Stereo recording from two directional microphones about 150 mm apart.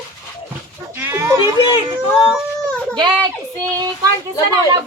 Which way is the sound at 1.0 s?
15° right (ahead or behind).